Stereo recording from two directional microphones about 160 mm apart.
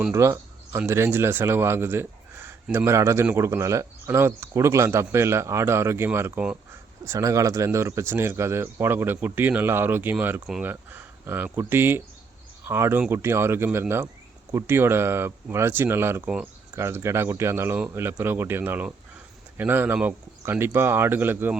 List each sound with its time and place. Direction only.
0.1 s speech: 20° right (ahead or behind)
10.4 s speech: centre (ahead or behind)
10.7 s speech: 15° right (ahead or behind)